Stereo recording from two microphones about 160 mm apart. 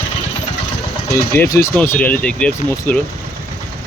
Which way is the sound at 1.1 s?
20° left (ahead or behind).